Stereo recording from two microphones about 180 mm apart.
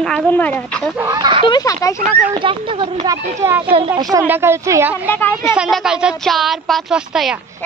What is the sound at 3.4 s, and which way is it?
Speech, 10° right (ahead or behind).